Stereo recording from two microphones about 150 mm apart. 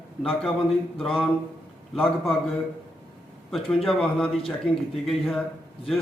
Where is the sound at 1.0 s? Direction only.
Centre (ahead or behind).